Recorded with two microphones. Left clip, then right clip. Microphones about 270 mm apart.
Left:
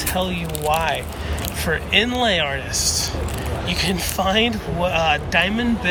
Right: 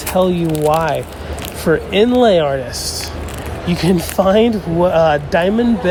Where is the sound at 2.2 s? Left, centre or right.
Centre.